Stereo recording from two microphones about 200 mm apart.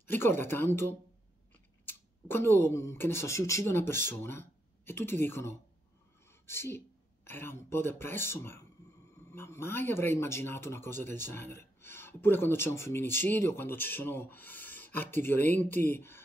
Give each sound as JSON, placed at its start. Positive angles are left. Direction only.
{"t": 0.0, "sound": "speech", "side_deg": 10}